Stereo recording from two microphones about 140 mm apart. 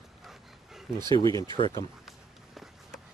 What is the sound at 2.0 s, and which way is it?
Run, centre (ahead or behind).